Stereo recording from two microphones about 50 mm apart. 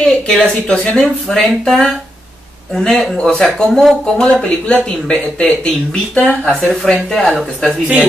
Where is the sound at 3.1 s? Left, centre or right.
Centre.